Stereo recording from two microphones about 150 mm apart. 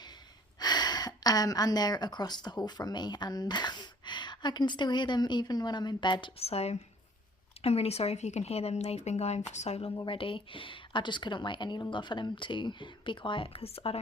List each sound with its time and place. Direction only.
0.6 s a woman's voice: 30° left (ahead or behind); by 9.9 s 45° left (ahead or behind)
9.9 s speech: 30° left (ahead or behind)